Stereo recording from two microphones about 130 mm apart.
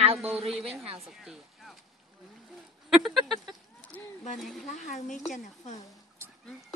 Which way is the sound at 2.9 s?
Centre (ahead or behind).